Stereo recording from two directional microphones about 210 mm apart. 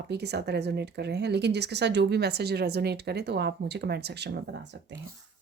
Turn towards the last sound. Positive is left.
turn(degrees=-55)  # may be behind; listen again after turning